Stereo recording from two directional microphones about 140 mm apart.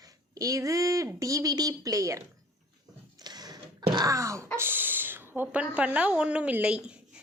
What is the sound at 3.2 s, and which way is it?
Wail, 30° right (ahead or behind).